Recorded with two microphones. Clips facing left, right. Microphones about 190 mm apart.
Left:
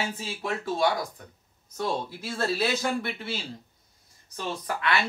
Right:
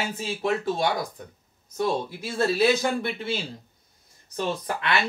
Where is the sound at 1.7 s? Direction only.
15° right (ahead or behind).